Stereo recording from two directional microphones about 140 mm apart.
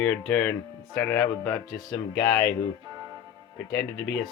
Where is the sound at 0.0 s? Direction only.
15° left (ahead or behind).